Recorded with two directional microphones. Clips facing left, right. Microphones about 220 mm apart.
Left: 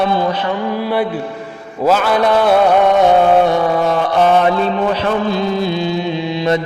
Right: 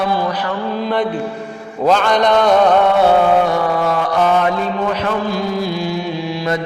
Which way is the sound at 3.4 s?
20° left (ahead or behind).